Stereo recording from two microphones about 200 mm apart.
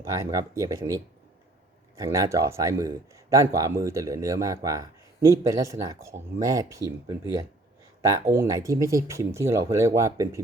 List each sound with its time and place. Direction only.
0.0 s speech: 15° right (ahead or behind)